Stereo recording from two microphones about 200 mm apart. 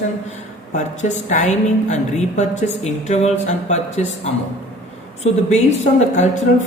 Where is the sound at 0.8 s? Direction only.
35° left (ahead or behind).